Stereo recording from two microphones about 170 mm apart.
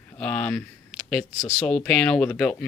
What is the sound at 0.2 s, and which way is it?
Speech, 5° left (ahead or behind).